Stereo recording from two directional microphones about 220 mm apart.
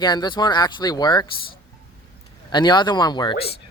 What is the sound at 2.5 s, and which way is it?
Speech, 20° left (ahead or behind).